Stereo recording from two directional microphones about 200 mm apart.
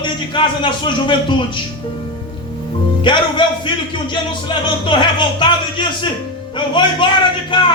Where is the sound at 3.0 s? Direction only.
25° left (ahead or behind).